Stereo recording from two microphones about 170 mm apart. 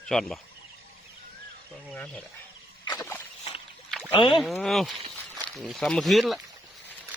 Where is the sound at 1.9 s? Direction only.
5° left (ahead or behind).